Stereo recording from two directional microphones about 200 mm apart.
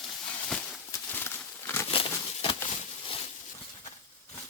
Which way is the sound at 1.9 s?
25° left (ahead or behind).